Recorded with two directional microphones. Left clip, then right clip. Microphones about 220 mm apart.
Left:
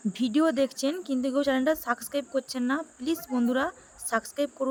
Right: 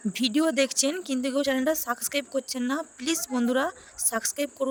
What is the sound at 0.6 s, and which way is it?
Speech, 35° right (ahead or behind).